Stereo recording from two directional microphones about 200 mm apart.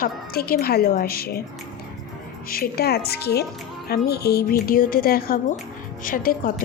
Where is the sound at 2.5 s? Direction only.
50° left (ahead or behind).